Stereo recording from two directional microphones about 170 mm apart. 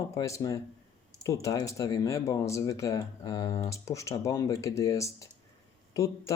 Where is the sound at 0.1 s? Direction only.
20° left (ahead or behind).